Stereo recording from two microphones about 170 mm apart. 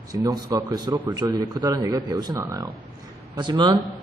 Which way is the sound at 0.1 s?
20° right (ahead or behind).